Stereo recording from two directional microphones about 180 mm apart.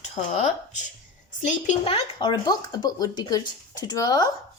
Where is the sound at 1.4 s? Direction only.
45° left (ahead or behind).